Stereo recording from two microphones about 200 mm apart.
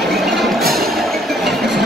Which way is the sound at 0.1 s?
Centre (ahead or behind).